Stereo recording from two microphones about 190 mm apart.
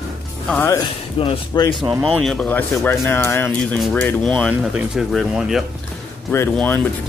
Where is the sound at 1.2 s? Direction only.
25° left (ahead or behind).